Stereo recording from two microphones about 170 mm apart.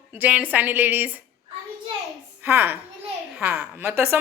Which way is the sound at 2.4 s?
10° right (ahead or behind).